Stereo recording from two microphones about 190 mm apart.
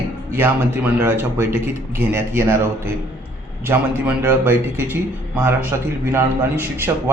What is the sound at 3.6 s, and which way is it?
A man's voice, 10° right (ahead or behind).